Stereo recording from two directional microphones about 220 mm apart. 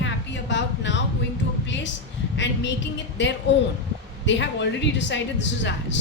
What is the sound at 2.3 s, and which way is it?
Speech, 55° left (ahead or behind).